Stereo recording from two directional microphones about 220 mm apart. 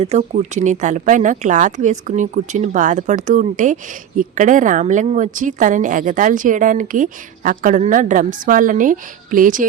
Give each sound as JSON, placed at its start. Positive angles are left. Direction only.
{"t": 0.0, "sound": "a woman's voice", "side_deg": -30}